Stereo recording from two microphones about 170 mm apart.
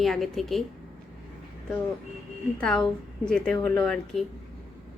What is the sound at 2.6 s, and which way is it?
A woman's voice, 5° left (ahead or behind).